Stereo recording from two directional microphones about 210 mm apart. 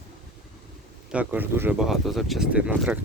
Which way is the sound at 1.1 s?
5° right (ahead or behind).